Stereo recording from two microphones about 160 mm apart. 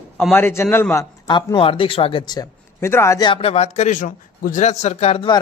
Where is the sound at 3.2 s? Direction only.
35° left (ahead or behind).